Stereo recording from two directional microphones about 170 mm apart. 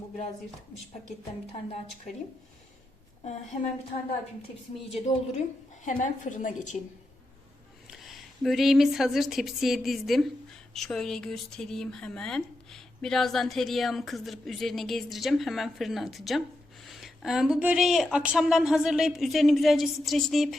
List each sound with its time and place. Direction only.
3.2 s a woman's voice: 45° left (ahead or behind)
4.9 s a woman's voice: 40° left (ahead or behind)
7.9 s a woman's voice: centre (ahead or behind)